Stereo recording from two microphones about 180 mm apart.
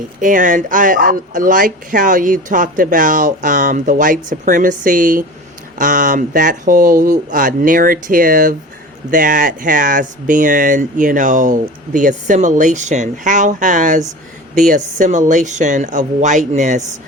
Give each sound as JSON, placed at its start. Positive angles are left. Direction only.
{"t": 0.2, "sound": "speech", "side_deg": -45}